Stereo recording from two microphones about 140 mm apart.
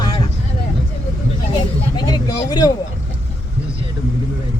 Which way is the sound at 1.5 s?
30° left (ahead or behind).